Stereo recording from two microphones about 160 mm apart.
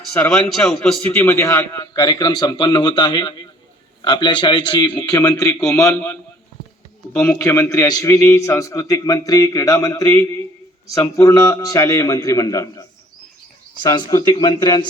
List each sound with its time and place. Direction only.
0.3 s a man's voice: centre (ahead or behind); by 12.8 s 20° left (ahead or behind)
13.8 s a man's voice: 25° left (ahead or behind)